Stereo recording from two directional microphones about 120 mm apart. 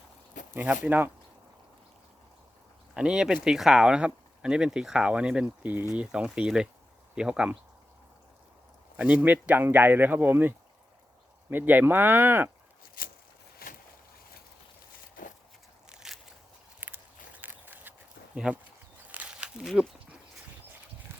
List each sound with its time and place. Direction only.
0.5 s speech: 15° right (ahead or behind)
2.9 s speech: 5° right (ahead or behind)
9.0 s speech: 10° right (ahead or behind)
11.5 s speech: 15° right (ahead or behind)
15.9 s crushing: 5° right (ahead or behind)
16.8 s walk: 15° right (ahead or behind)
17.4 s a sound: 15° right (ahead or behind)
18.3 s speech: 5° right (ahead or behind)
19.1 s a sound: 10° right (ahead or behind)